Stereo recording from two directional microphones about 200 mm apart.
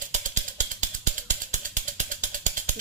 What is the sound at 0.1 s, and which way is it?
Ratchet, 35° right (ahead or behind).